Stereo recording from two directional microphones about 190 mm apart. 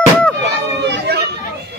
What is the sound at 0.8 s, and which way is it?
Children playing, 60° right (ahead or behind).